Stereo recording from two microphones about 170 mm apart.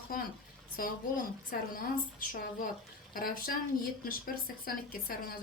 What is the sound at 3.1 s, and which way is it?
Speech, 55° left (ahead or behind).